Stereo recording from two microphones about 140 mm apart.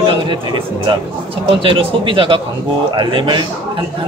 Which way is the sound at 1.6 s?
40° right (ahead or behind).